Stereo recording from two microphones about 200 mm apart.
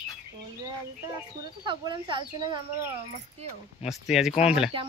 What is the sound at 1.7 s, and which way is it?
Speech, 25° right (ahead or behind).